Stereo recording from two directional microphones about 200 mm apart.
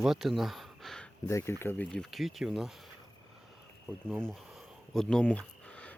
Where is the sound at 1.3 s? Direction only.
15° left (ahead or behind).